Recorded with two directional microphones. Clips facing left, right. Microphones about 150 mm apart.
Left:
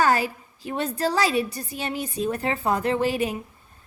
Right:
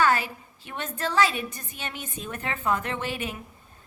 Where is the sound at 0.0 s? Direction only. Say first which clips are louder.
Left 2 dB; 35° left (ahead or behind).